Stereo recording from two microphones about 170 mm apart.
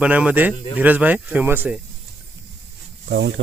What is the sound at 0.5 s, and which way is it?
Speech, 35° left (ahead or behind).